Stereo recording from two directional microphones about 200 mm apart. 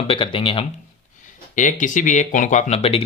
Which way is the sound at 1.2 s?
40° left (ahead or behind).